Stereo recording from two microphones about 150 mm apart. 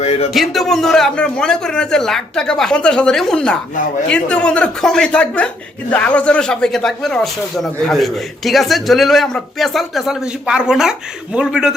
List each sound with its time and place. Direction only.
0.0 s speech: 45° left (ahead or behind)
0.3 s a man's voice: centre (ahead or behind)